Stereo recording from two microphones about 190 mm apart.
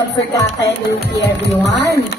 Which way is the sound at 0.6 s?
65° left (ahead or behind).